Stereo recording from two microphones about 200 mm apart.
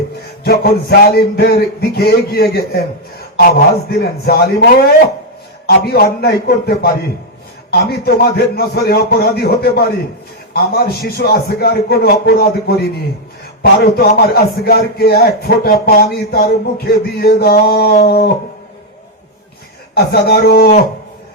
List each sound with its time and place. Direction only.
0.4 s a man's voice: 50° left (ahead or behind)
19.9 s a man's voice: 50° left (ahead or behind)